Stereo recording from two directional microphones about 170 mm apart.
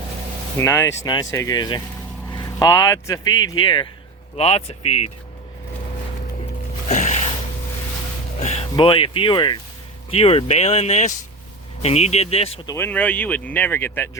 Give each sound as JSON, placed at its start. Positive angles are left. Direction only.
{"t": 0.6, "sound": "speech", "side_deg": 15}
{"t": 6.8, "sound": "music", "side_deg": 45}
{"t": 8.4, "sound": "music", "side_deg": 40}
{"t": 8.7, "sound": "speech", "side_deg": 30}
{"t": 12.6, "sound": "speech", "side_deg": 15}